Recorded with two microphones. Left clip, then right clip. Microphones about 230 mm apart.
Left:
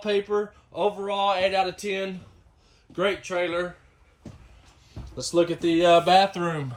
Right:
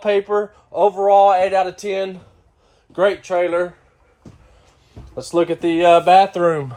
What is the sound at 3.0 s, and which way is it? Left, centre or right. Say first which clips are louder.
Speech: right 9 dB; centre.